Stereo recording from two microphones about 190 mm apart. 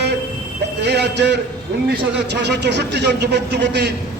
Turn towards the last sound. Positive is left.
turn(degrees=-65)  # may be behind; listen again after turning